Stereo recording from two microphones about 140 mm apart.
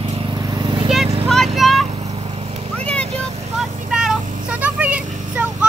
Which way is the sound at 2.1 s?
40° right (ahead or behind).